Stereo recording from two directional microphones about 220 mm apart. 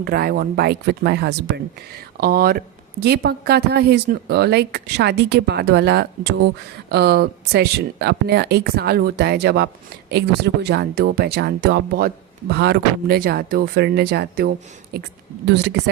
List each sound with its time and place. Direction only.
0.0 s speech: 45° right (ahead or behind)